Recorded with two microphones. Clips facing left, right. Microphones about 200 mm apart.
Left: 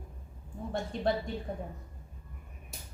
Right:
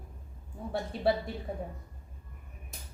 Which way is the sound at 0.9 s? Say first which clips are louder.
Right 2 dB; 5° right (ahead or behind).